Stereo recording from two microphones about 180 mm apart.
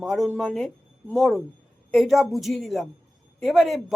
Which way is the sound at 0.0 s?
Centre (ahead or behind).